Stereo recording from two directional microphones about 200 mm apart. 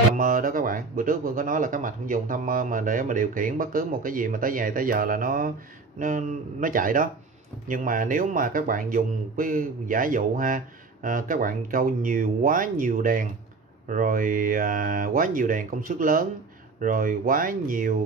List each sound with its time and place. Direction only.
0.2 s speech: 45° right (ahead or behind)